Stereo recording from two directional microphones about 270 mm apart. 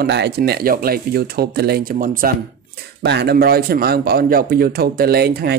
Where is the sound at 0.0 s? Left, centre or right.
Right.